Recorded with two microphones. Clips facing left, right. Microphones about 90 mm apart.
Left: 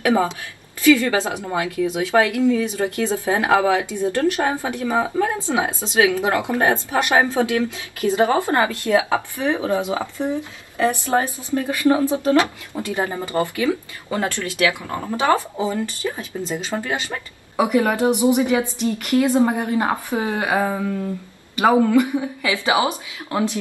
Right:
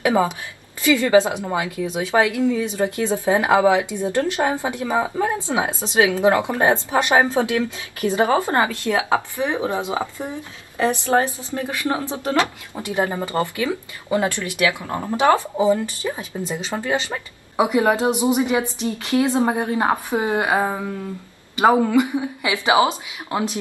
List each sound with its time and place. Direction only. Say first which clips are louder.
0.0 s a woman's voice: even; 20° right (ahead or behind)